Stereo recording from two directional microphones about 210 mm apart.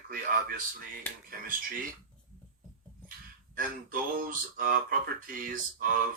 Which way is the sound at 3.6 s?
40° right (ahead or behind).